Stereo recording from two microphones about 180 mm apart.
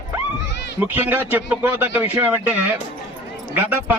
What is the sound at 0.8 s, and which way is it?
A man's voice, 10° right (ahead or behind).